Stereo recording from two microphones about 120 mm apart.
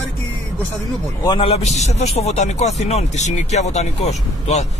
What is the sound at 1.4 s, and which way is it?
Speech, 60° left (ahead or behind).